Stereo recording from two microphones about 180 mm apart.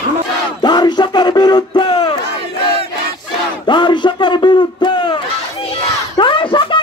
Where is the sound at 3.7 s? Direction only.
25° left (ahead or behind).